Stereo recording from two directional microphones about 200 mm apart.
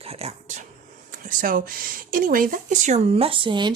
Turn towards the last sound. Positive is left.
turn(degrees=-25)  # may be behind; listen again after turning